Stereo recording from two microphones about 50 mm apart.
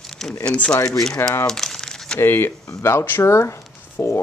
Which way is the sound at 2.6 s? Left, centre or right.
Left.